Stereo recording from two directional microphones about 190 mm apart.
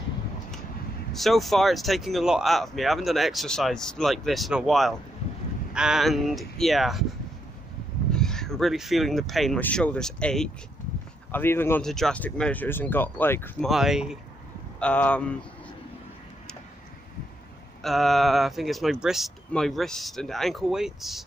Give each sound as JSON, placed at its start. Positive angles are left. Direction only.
{"t": 1.1, "sound": "speech", "side_deg": 0}
{"t": 8.1, "sound": "speech", "side_deg": 5}
{"t": 13.7, "sound": "speech", "side_deg": 0}
{"t": 17.8, "sound": "speech", "side_deg": 0}